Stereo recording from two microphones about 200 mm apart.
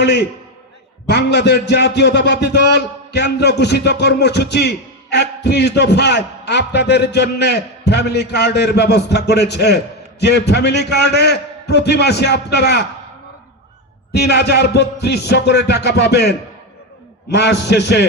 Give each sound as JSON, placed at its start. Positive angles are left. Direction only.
{"t": 0.0, "sound": "a man's voice", "side_deg": 60}
{"t": 14.1, "sound": "a man's voice", "side_deg": 55}
{"t": 17.3, "sound": "a man's voice", "side_deg": 60}